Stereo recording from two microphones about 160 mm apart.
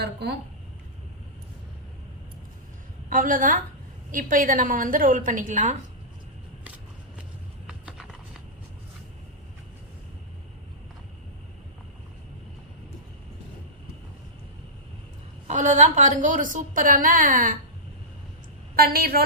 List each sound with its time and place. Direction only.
0.0 s speech: 90° right
3.1 s a woman's voice: 60° right (ahead or behind)
7.9 s a sound: centre (ahead or behind)
15.4 s a woman's voice: 50° right (ahead or behind)
18.8 s a woman's voice: 70° right (ahead or behind)